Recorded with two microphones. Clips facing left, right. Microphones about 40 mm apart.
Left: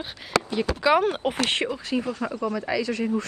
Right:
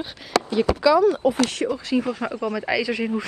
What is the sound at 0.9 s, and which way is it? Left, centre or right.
Speech, left.